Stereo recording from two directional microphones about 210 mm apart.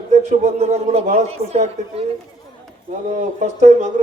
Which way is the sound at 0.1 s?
30° right (ahead or behind).